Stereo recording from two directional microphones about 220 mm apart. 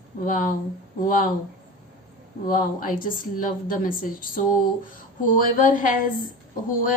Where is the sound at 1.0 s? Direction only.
40° left (ahead or behind).